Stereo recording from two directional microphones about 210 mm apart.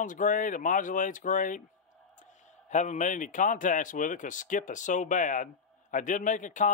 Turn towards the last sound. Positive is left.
turn(degrees=35)  # may be behind; listen again after turning